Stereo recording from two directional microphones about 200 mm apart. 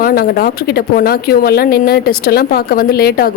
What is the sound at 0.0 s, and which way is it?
A woman's voice, 45° left (ahead or behind).